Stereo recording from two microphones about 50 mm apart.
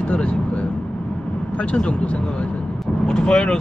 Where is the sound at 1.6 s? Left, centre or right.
Left.